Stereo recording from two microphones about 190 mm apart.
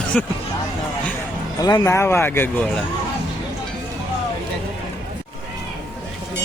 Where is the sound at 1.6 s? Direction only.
15° left (ahead or behind).